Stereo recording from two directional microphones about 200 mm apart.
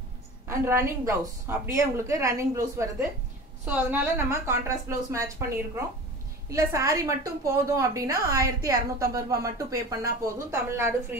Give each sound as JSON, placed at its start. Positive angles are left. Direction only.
{"t": 0.5, "sound": "a woman's voice", "side_deg": -15}
{"t": 6.5, "sound": "a woman's voice", "side_deg": -15}